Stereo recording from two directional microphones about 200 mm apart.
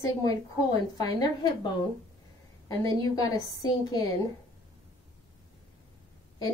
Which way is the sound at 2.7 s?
20° left (ahead or behind).